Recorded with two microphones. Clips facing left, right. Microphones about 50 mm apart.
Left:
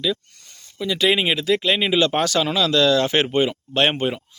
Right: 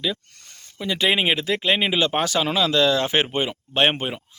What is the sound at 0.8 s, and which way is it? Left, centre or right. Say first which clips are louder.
Speech: left 2 dB; right.